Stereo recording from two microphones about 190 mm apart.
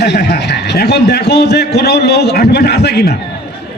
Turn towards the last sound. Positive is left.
turn(degrees=60)  # may be behind; listen again after turning